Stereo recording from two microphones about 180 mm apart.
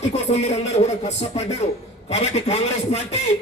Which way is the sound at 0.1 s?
40° left (ahead or behind).